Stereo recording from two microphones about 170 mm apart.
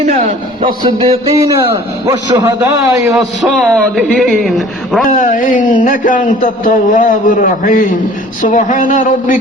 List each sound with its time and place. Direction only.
0.6 s a man's voice: 30° right (ahead or behind)
3.2 s a man's voice: centre (ahead or behind)
5.0 s a man's voice: 50° left (ahead or behind)